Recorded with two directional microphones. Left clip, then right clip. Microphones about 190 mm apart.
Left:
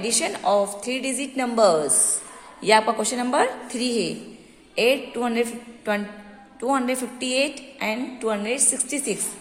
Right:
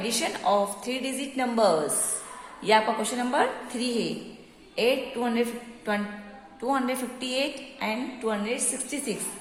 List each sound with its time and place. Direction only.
0.0 s a woman's voice: 30° left (ahead or behind)